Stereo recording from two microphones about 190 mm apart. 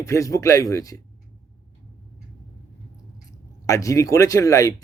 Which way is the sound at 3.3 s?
15° left (ahead or behind).